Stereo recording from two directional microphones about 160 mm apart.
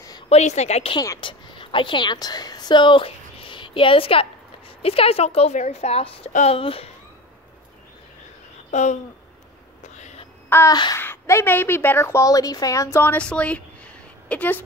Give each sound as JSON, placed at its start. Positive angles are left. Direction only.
{"t": 0.3, "sound": "a woman's voice", "side_deg": 45}
{"t": 0.9, "sound": "speech", "side_deg": 20}
{"t": 1.2, "sound": "a woman's voice", "side_deg": 30}
{"t": 8.6, "sound": "speech", "side_deg": 45}
{"t": 9.9, "sound": "a sound", "side_deg": 45}
{"t": 10.5, "sound": "a sound", "side_deg": 15}
{"t": 11.0, "sound": "a woman's voice", "side_deg": 15}